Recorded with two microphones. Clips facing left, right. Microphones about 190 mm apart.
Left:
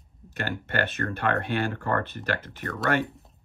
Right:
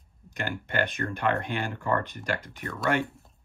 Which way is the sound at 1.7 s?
55° left (ahead or behind).